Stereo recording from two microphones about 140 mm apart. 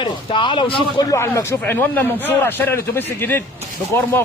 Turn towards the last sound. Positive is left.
turn(degrees=20)  # may be behind; listen again after turning